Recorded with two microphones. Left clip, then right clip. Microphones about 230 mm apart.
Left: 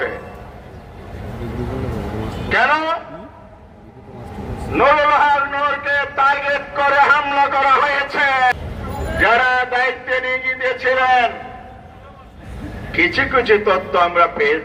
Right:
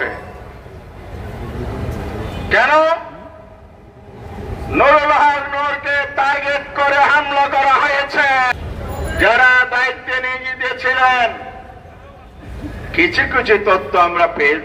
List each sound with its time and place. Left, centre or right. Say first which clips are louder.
2.5 s music: right 4 dB; right
4.8 s a sound: right 2 dB; right
13.0 s a man's voice: right 1 dB; right